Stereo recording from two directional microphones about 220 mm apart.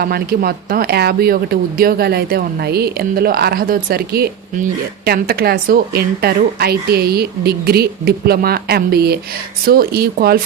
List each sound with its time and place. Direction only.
0.0 s speech: 45° right (ahead or behind)